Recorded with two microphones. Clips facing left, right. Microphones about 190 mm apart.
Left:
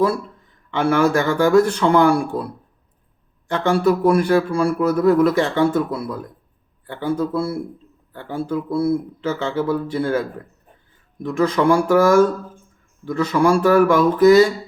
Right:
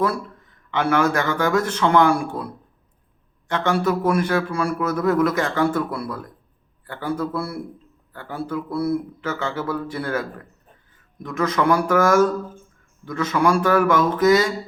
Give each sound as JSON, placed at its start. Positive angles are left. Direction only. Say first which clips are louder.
{"t": 0.7, "sound": "a man's voice", "louder": "left 3 dB", "side_deg": 30}
{"t": 3.5, "sound": "a man's voice", "louder": "left 4 dB", "side_deg": 35}
{"t": 13.1, "sound": "a man's voice", "louder": "left 3 dB", "side_deg": 30}